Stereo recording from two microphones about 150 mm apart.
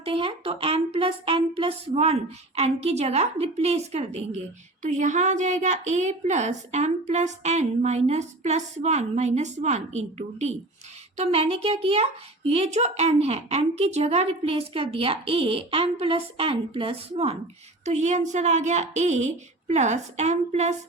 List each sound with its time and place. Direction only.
0.0 s a woman's voice: 40° right (ahead or behind)
17.8 s a woman's voice: 50° right (ahead or behind)